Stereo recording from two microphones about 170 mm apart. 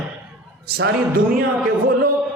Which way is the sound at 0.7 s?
60° right (ahead or behind).